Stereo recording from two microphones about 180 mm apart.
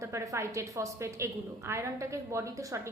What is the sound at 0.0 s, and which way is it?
A woman's voice, 15° right (ahead or behind).